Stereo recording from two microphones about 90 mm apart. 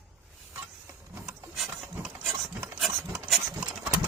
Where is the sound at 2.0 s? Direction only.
10° right (ahead or behind).